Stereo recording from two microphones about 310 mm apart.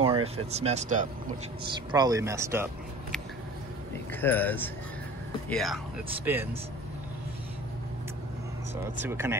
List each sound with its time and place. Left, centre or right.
0.0 s speech: centre
1.9 s speech: centre
4.1 s speech: centre
9.0 s speech: centre